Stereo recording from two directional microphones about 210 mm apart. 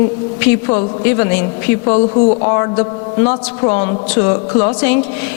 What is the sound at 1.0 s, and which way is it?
A woman's voice, 15° left (ahead or behind).